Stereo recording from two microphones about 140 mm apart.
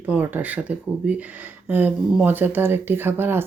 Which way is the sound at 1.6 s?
15° right (ahead or behind).